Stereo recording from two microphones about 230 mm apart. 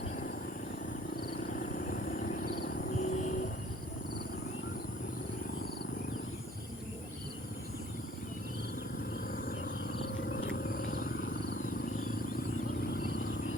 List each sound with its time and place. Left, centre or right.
1.1 s insect: left
9.3 s insect: left
10.4 s wild animals: left